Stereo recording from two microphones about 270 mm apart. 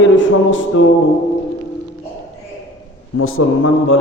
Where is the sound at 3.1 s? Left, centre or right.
Left.